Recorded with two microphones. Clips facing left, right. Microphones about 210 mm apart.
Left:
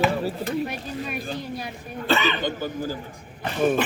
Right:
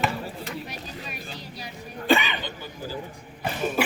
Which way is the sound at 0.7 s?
55° left (ahead or behind).